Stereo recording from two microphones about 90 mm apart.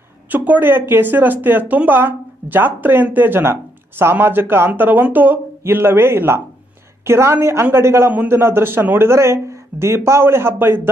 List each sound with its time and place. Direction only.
0.3 s speech: 20° right (ahead or behind)
8.1 s a man's voice: 15° right (ahead or behind)
8.4 s speech: 25° right (ahead or behind)